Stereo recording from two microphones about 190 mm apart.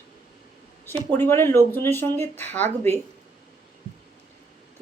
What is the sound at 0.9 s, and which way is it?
Speech, 10° left (ahead or behind).